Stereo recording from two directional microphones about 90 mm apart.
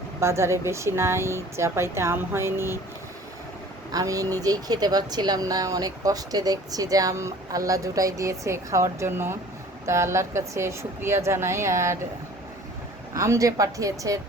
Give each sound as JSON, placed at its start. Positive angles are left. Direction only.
{"t": 0.2, "sound": "speech", "side_deg": -30}
{"t": 3.9, "sound": "speech", "side_deg": -40}
{"t": 13.1, "sound": "speech", "side_deg": -35}